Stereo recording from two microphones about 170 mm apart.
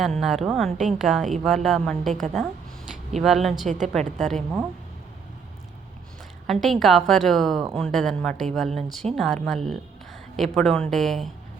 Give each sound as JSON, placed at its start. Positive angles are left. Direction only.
{"t": 0.0, "sound": "a woman's voice", "side_deg": 0}
{"t": 3.7, "sound": "a woman's voice", "side_deg": -45}
{"t": 3.9, "sound": "a woman's voice", "side_deg": 5}
{"t": 6.5, "sound": "a woman's voice", "side_deg": 0}